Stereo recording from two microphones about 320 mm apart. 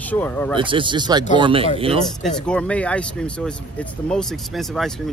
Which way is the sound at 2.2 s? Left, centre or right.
Centre.